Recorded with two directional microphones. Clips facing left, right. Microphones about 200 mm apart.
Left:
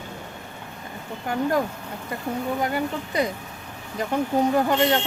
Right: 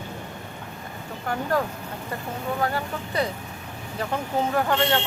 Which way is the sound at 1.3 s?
15° left (ahead or behind).